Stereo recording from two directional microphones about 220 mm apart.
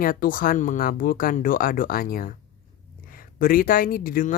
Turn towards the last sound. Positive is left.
turn(degrees=40)  # may be behind; listen again after turning